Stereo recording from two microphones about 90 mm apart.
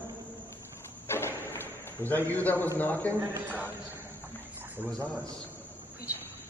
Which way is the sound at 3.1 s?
20° right (ahead or behind).